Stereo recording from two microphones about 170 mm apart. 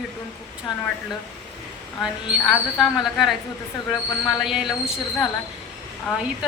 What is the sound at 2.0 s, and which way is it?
A woman's voice, 5° right (ahead or behind).